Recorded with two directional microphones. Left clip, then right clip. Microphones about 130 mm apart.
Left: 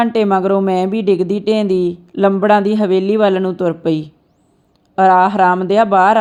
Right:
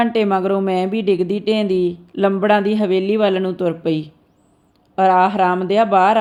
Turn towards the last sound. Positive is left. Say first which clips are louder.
# left 3 dB
turn(degrees=30)  # may be behind; listen again after turning